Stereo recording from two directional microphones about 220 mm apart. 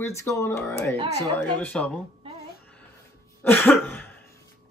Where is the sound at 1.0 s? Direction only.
20° right (ahead or behind).